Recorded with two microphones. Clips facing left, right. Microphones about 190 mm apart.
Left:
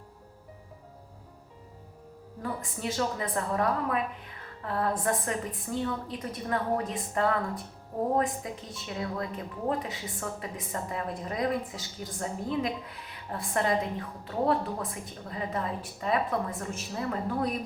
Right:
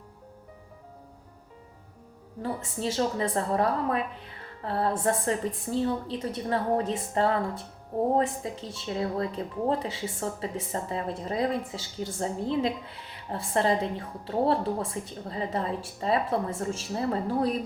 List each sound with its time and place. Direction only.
2.4 s speech: 30° right (ahead or behind)